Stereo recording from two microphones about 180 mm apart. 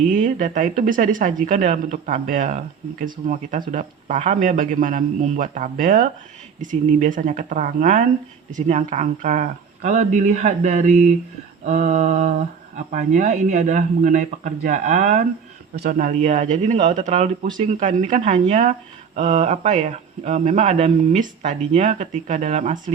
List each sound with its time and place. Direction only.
0.0 s speech: 45° right (ahead or behind)